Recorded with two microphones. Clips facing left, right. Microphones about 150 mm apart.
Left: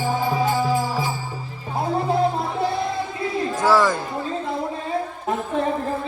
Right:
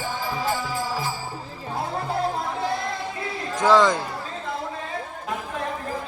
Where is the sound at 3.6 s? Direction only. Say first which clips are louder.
Right 1 dB; 20° right (ahead or behind).